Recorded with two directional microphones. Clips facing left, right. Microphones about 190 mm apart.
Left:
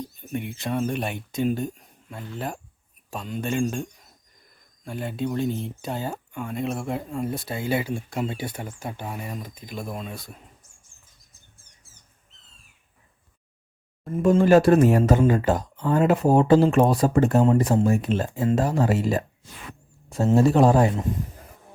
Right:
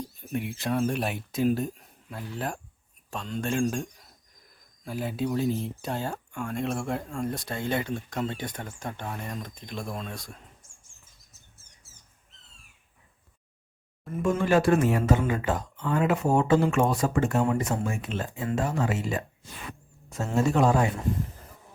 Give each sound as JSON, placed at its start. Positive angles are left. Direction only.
{"t": 0.2, "sound": "speech", "side_deg": 0}
{"t": 14.0, "sound": "speech", "side_deg": 40}
{"t": 20.3, "sound": "speech", "side_deg": 35}